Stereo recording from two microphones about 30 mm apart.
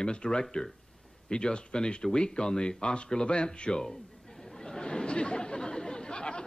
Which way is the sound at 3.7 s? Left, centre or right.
Centre.